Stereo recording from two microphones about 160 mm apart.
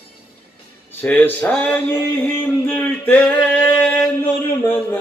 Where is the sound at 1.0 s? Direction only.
10° left (ahead or behind).